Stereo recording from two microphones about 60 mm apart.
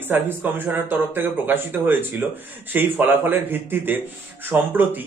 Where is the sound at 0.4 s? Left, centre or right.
Right.